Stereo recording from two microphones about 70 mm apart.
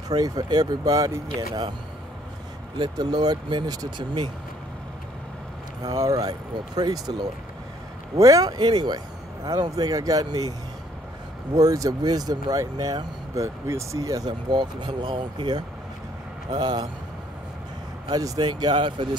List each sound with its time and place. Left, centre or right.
0.1 s a man's voice: right
2.8 s a man's voice: right
5.9 s speech: right
6.2 s a man's voice: right
8.2 s speech: right
8.5 s a man's voice: right
11.5 s speech: right
14.5 s speech: right
16.4 s speech: right
18.1 s speech: right